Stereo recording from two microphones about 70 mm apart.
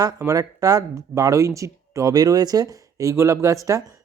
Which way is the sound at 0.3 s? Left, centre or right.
Right.